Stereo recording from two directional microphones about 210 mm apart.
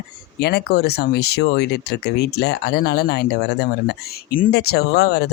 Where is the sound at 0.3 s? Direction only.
50° left (ahead or behind).